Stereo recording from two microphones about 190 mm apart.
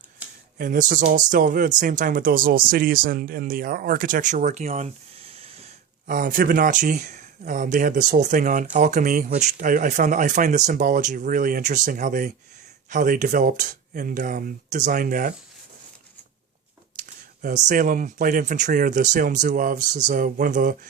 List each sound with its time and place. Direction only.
0.2 s a sound: 10° right (ahead or behind)
0.6 s speech: 45° right (ahead or behind)
6.1 s speech: 45° right (ahead or behind)
17.0 s speech: 45° right (ahead or behind)